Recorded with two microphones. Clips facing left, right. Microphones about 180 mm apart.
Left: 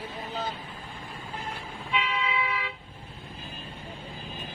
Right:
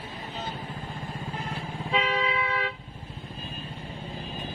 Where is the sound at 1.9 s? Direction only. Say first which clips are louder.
Right 3 dB; 40° right (ahead or behind).